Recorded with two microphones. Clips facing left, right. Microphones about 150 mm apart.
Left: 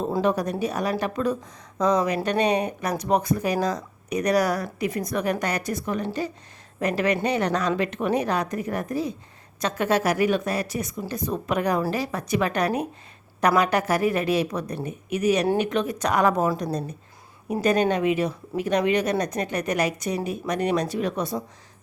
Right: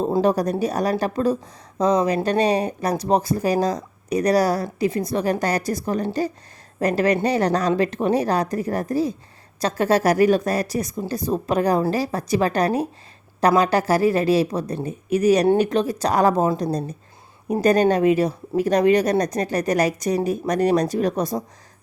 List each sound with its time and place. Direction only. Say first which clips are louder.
0.2 s speech: right 3 dB; 35° right (ahead or behind)
17.5 s speech: right 4 dB; 40° right (ahead or behind)